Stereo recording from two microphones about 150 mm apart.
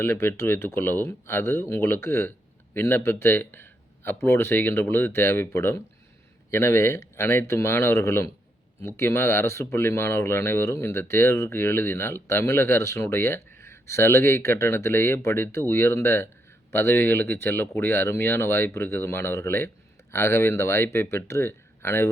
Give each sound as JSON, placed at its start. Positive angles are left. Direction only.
{"t": 0.0, "sound": "speech", "side_deg": 15}